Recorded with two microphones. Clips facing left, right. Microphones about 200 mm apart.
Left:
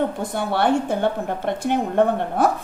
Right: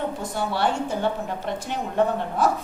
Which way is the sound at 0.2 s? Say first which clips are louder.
Left 3 dB; 55° left (ahead or behind).